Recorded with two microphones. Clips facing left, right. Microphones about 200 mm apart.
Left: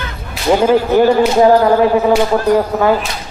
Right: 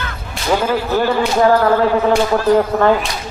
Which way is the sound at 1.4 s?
15° left (ahead or behind).